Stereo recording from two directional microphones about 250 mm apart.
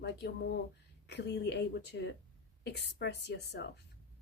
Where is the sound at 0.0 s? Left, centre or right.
Left.